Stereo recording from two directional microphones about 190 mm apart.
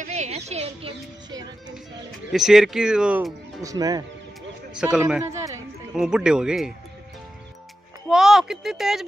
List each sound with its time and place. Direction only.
0.0 s a sound: 35° right (ahead or behind)
2.3 s speech: centre (ahead or behind)
3.6 s speech: 20° right (ahead or behind)
4.9 s speech: 5° right (ahead or behind)
5.3 s speech: 15° right (ahead or behind)
5.9 s speech: 5° right (ahead or behind)
8.1 s speech: centre (ahead or behind)